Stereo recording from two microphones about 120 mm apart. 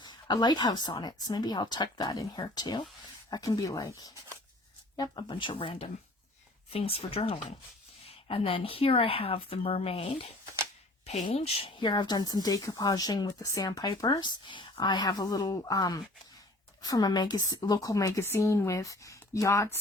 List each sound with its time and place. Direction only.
0.0 s speech: 40° left (ahead or behind)
4.9 s speech: 40° left (ahead or behind)
11.3 s a woman's voice: 55° left (ahead or behind); by 19.8 s 25° left (ahead or behind)